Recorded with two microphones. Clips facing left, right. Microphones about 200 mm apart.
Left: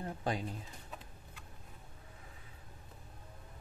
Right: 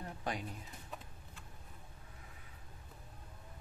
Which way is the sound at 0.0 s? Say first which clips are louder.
Left 4 dB; 30° left (ahead or behind).